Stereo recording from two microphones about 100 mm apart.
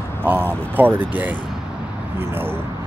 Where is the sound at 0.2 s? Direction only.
20° right (ahead or behind).